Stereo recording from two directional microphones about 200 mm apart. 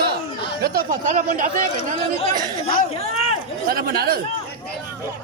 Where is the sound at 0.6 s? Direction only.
45° right (ahead or behind).